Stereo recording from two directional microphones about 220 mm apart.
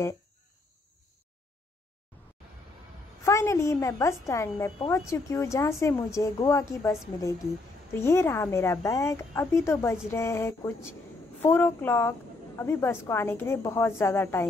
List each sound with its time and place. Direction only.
3.3 s a woman's voice: 15° left (ahead or behind)